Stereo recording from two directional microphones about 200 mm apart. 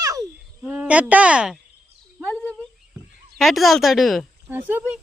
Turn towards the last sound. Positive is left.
turn(degrees=-10)  # may be behind; listen again after turning